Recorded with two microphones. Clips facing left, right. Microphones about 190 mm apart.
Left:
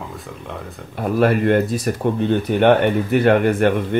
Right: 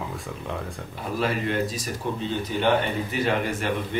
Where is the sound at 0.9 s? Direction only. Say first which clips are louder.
Left 10 dB; 55° left (ahead or behind).